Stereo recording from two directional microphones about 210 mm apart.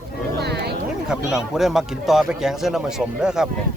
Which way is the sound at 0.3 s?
50° right (ahead or behind).